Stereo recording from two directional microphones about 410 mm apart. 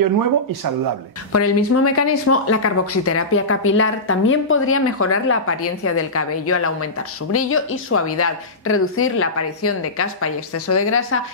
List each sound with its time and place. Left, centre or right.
1.3 s speech: left